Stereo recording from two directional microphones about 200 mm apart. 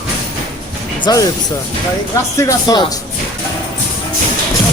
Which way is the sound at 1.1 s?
20° left (ahead or behind).